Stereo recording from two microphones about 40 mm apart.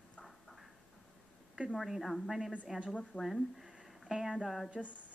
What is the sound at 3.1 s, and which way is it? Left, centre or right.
Speech, left.